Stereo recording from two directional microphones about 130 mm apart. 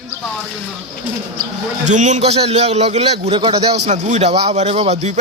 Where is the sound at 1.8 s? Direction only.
65° right (ahead or behind); by 3.6 s 45° right (ahead or behind).